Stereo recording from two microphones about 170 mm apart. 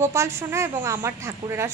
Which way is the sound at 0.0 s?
15° right (ahead or behind).